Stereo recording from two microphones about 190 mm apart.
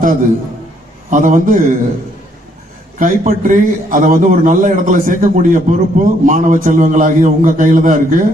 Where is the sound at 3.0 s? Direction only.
40° right (ahead or behind).